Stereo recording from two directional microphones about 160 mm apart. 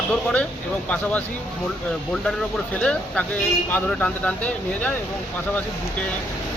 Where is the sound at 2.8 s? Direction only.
5° left (ahead or behind).